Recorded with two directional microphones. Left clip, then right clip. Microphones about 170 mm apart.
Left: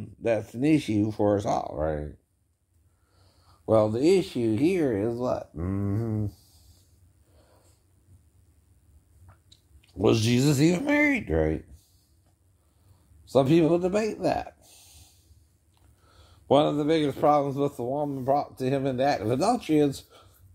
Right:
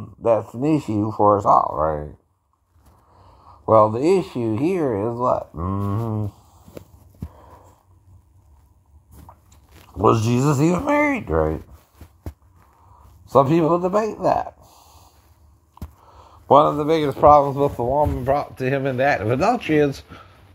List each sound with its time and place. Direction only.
0.0 s a sound: 20° left (ahead or behind)
0.6 s speech: 20° left (ahead or behind)
1.7 s speech: 10° left (ahead or behind)
3.6 s speech: 5° left (ahead or behind)
5.7 s speech: 15° left (ahead or behind)
9.9 s speech: centre (ahead or behind)
13.3 s speech: 10° left (ahead or behind)
16.4 s speech: 5° left (ahead or behind)
17.3 s speech: 5° left (ahead or behind)